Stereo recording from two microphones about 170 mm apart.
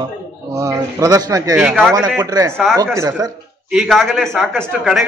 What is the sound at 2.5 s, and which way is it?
Speech, 5° left (ahead or behind).